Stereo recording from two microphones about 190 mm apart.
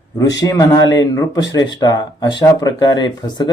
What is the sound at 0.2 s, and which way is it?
A man's voice, 20° left (ahead or behind).